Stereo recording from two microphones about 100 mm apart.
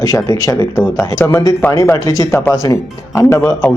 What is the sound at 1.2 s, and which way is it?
Speech, 20° left (ahead or behind).